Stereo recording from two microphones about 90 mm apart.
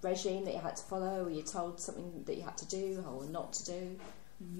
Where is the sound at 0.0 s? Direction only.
10° right (ahead or behind).